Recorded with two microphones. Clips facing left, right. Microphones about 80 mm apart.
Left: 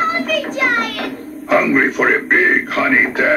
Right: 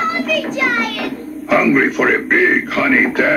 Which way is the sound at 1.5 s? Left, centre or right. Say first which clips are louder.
Right 1 dB; left.